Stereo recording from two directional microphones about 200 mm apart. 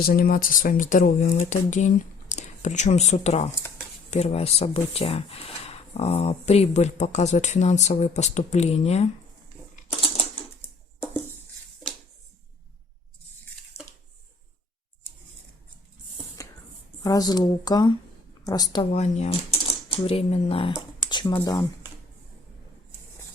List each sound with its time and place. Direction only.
0.0 s speech: 45° left (ahead or behind)
3.5 s a sound: 10° left (ahead or behind)
4.1 s speech: 30° left (ahead or behind)
10.0 s typewriter: 25° left (ahead or behind)
13.7 s a sound: 30° left (ahead or behind)
16.4 s music: 15° left (ahead or behind)
17.0 s speech: 20° left (ahead or behind)
18.9 s speech: 35° left (ahead or behind); by 21.7 s 15° left (ahead or behind)